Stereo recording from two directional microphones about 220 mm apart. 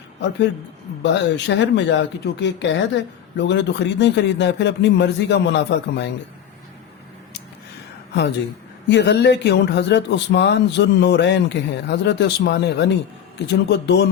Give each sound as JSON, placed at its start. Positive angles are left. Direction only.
{"t": 1.0, "sound": "speech", "side_deg": 55}
{"t": 8.9, "sound": "speech", "side_deg": 50}